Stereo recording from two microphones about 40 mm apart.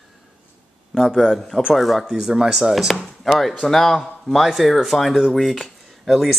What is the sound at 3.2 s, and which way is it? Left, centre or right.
A man's voice, centre.